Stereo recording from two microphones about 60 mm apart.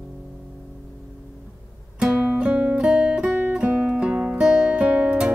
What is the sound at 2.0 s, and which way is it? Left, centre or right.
Music, centre.